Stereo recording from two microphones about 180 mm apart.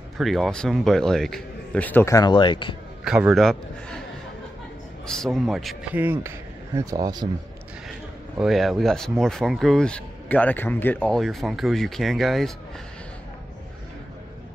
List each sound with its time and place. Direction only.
0.2 s speech: centre (ahead or behind); by 2.7 s 25° left (ahead or behind)
3.1 s speech: 5° right (ahead or behind)
5.0 s speech: centre (ahead or behind); by 7.2 s 20° right (ahead or behind)
8.4 s speech: centre (ahead or behind)